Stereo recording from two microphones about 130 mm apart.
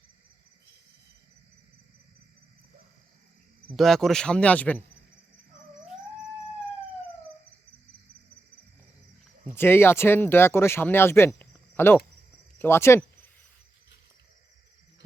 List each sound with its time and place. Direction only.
3.8 s speech: centre (ahead or behind)
9.5 s speech: 20° left (ahead or behind)
11.3 s a sound: 15° left (ahead or behind)
12.5 s speech: 15° left (ahead or behind)